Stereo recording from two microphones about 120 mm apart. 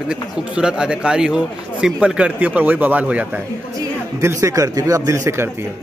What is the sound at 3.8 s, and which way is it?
A man's voice, 25° right (ahead or behind).